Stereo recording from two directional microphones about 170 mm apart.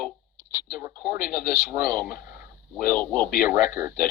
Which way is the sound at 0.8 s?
15° right (ahead or behind).